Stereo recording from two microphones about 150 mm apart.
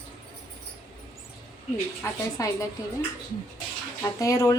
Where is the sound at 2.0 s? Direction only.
20° left (ahead or behind).